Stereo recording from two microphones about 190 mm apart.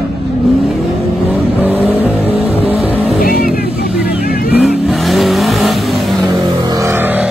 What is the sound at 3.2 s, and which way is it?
Vehicle, 50° left (ahead or behind).